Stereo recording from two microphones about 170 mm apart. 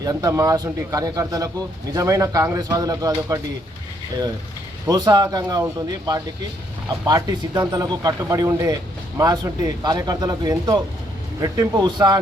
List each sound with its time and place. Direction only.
0.0 s speech: 20° right (ahead or behind)
4.9 s speech: 25° right (ahead or behind)